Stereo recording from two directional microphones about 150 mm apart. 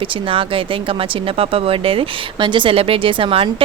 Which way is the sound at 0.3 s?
35° right (ahead or behind).